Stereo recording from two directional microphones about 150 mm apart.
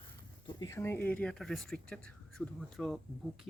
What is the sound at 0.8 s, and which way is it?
Speech, 15° left (ahead or behind).